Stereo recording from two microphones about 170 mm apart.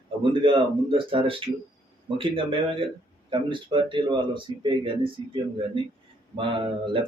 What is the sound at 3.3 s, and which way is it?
A man's voice, 30° right (ahead or behind).